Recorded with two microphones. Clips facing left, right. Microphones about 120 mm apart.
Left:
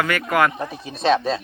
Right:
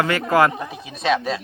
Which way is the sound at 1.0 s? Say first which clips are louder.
Left 2 dB; 30° left (ahead or behind).